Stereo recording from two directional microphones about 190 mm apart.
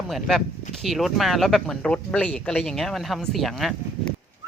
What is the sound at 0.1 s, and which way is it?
Speech, centre (ahead or behind).